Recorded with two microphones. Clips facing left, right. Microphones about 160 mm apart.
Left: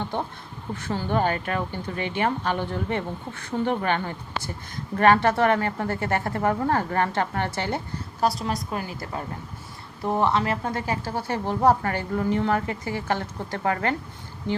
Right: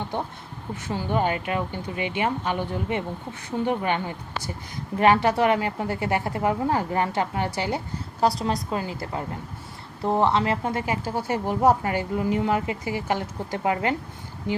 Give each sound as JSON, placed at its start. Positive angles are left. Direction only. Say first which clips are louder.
{"t": 0.8, "sound": "speech", "louder": "even", "side_deg": -15}
{"t": 8.4, "sound": "a woman's voice", "louder": "right 2 dB", "side_deg": -25}